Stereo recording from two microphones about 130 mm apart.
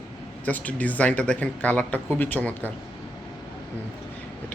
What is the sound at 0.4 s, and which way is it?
Speech, 10° left (ahead or behind).